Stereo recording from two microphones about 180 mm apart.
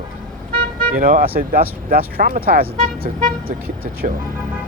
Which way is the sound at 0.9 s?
50° right (ahead or behind).